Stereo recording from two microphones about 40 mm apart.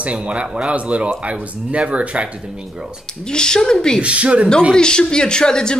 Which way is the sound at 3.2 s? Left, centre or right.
Centre.